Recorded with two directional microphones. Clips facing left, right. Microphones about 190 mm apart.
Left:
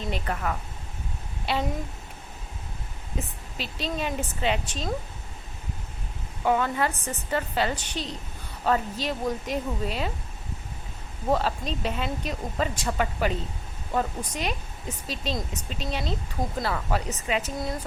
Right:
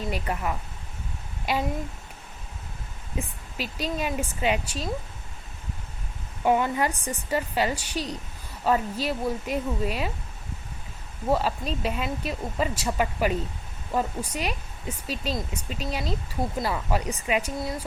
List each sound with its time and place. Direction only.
0.1 s speech: 10° right (ahead or behind)
3.2 s speech: 10° right (ahead or behind)
6.4 s speech: 15° right (ahead or behind)
11.3 s speech: 10° right (ahead or behind)